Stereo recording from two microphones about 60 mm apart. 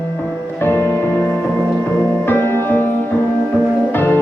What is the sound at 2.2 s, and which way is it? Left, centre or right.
Music, left.